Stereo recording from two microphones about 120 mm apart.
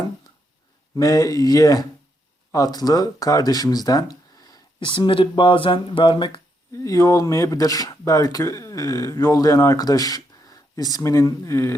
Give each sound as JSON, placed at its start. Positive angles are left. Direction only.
{"t": 0.9, "sound": "speech", "side_deg": 30}
{"t": 6.8, "sound": "speech", "side_deg": 25}